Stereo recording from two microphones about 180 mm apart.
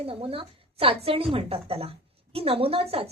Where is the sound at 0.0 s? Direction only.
30° right (ahead or behind).